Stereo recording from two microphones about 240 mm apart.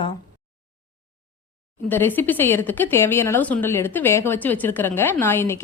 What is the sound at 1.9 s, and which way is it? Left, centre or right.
Speech, centre.